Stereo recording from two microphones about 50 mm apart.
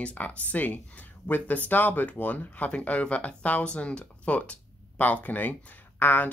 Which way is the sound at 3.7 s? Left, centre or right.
Left.